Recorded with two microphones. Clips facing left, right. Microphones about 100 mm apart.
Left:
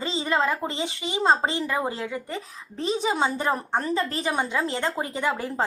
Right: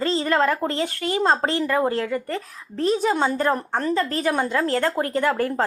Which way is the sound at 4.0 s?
40° right (ahead or behind).